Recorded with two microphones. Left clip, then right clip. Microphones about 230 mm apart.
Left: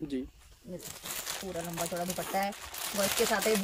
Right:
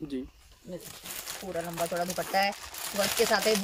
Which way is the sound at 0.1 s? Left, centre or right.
Centre.